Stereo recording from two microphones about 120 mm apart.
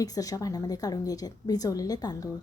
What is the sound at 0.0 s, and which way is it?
A woman's voice, 30° left (ahead or behind).